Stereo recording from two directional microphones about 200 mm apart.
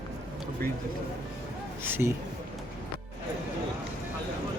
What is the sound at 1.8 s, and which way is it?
Speech, 10° right (ahead or behind).